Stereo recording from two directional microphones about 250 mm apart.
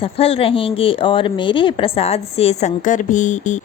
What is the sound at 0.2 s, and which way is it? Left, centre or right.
A woman's voice, left.